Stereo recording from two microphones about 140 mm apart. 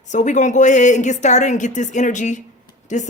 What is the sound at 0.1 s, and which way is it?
Speech, 60° left (ahead or behind).